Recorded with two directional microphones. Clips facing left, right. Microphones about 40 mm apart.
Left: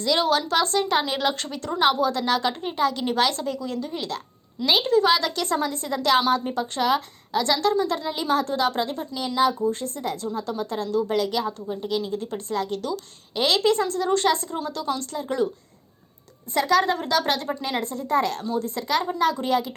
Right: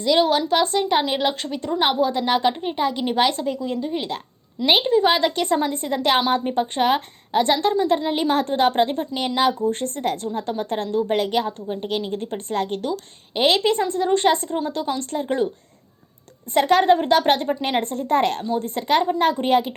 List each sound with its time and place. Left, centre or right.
0.0 s a woman's voice: centre; by 8.1 s right
8.1 s a woman's voice: right
9.2 s a woman's voice: right
16.6 s a woman's voice: right